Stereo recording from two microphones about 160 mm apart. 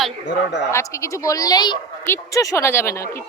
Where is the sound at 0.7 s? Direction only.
20° left (ahead or behind).